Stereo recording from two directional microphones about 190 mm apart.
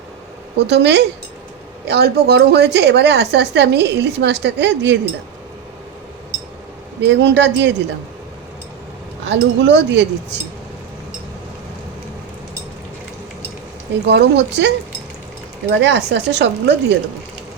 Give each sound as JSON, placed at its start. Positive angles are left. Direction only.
{"t": 0.6, "sound": "a woman's voice", "side_deg": -65}
{"t": 7.0, "sound": "speech", "side_deg": -65}
{"t": 9.2, "sound": "a woman's voice", "side_deg": -65}
{"t": 14.0, "sound": "a woman's voice", "side_deg": -65}
{"t": 15.8, "sound": "a woman's voice", "side_deg": -65}